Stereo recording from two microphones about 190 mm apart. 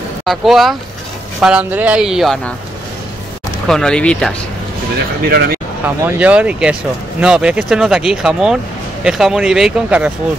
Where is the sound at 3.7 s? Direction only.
5° left (ahead or behind).